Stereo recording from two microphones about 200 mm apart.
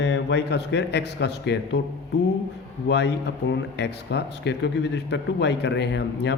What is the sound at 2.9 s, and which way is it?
A man's voice, 60° left (ahead or behind).